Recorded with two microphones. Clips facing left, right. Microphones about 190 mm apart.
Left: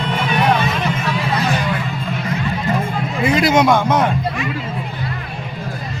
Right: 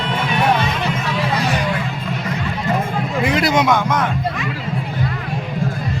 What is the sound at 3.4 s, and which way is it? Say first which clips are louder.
Speech: left 3 dB; 25° left (ahead or behind).